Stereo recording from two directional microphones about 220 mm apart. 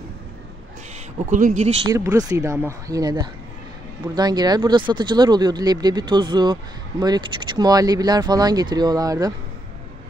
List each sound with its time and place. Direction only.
1.1 s speech: 35° right (ahead or behind)
1.9 s speech: 15° right (ahead or behind)